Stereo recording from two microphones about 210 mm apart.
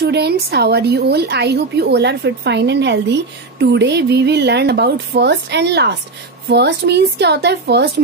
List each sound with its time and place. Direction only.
0.0 s a woman's voice: 50° right (ahead or behind)